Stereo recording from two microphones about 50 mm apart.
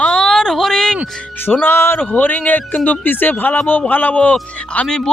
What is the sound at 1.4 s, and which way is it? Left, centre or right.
Music, left.